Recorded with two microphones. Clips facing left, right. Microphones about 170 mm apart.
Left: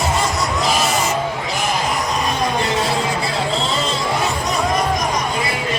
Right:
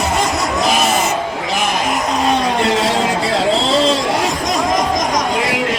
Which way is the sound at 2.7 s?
90° right.